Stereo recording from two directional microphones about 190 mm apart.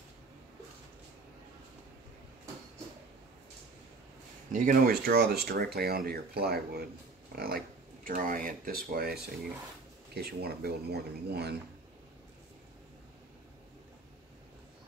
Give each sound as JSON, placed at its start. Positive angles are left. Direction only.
{"t": 4.5, "sound": "speech", "side_deg": -45}